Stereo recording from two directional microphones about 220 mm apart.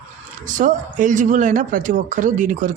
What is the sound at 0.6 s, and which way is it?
A man's voice, 35° right (ahead or behind).